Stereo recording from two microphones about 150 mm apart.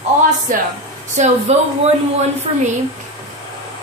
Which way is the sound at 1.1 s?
50° right (ahead or behind).